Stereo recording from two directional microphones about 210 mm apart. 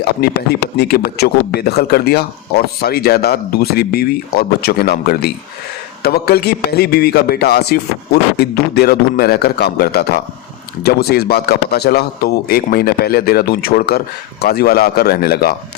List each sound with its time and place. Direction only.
0.8 s speech: 50° left (ahead or behind)